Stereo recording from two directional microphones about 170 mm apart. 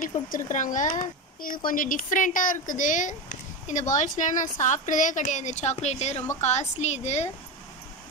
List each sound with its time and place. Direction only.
0.0 s a woman's voice: 50° left (ahead or behind)